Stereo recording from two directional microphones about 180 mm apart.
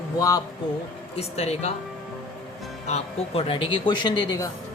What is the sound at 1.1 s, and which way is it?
Speech, 35° left (ahead or behind).